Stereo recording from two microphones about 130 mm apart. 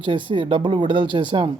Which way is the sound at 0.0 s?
40° right (ahead or behind).